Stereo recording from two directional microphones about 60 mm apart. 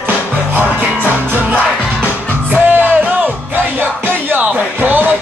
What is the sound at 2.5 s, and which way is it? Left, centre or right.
Music, right.